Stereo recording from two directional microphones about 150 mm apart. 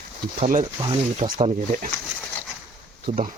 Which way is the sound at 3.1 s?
55° right (ahead or behind).